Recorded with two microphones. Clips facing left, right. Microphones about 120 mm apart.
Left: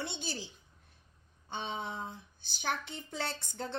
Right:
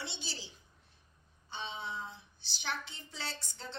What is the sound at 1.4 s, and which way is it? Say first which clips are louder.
A woman's voice: left 4 dB; 50° left (ahead or behind).